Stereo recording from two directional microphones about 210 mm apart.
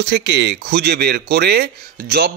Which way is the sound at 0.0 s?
55° right (ahead or behind).